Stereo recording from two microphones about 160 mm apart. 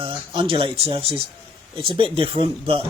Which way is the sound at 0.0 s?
35° right (ahead or behind).